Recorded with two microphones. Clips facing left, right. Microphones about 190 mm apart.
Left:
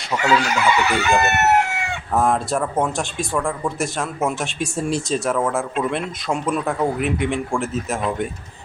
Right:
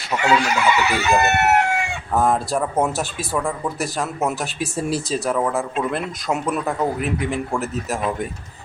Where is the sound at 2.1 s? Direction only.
Centre (ahead or behind).